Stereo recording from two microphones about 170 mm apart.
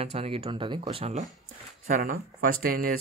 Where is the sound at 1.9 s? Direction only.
55° right (ahead or behind).